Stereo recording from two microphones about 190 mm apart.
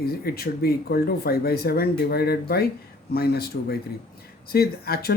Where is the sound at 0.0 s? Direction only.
55° left (ahead or behind).